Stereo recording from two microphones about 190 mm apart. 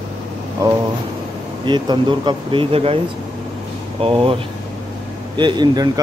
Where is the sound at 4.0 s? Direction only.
30° right (ahead or behind).